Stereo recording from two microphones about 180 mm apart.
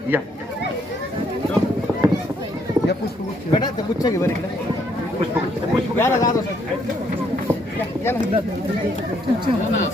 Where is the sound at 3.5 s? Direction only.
25° left (ahead or behind).